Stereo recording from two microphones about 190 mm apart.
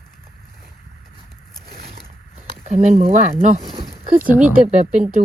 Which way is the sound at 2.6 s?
35° right (ahead or behind).